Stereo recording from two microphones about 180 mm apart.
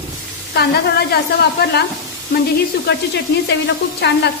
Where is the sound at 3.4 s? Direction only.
65° left (ahead or behind).